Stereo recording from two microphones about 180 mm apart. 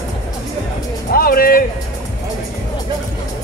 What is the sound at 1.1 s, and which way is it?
Music, 55° left (ahead or behind).